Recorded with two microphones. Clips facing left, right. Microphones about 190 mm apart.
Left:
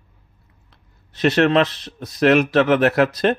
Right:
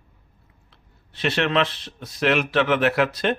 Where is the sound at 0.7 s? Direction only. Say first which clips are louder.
Left 1 dB; 40° left (ahead or behind).